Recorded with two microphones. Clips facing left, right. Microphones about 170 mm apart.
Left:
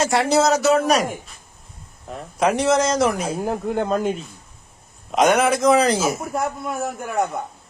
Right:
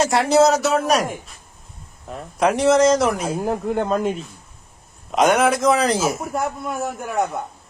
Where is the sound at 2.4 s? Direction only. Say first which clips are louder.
Right 3 dB; centre (ahead or behind).